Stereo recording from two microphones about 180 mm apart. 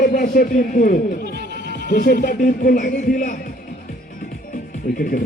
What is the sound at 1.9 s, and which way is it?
A man's voice, 55° left (ahead or behind).